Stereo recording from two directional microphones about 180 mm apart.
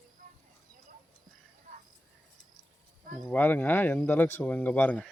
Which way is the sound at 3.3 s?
10° left (ahead or behind).